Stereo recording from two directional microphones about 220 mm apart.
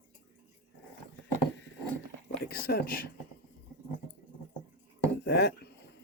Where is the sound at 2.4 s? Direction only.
45° left (ahead or behind).